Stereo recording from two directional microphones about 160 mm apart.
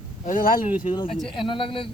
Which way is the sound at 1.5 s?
35° left (ahead or behind).